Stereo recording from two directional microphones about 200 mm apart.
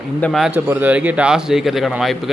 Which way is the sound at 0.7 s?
10° right (ahead or behind).